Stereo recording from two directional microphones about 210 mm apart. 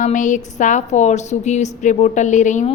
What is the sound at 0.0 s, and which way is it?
A woman's voice, 35° left (ahead or behind).